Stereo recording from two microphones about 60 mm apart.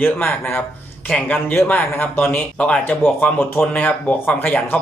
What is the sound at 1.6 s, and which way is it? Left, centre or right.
Speech, left.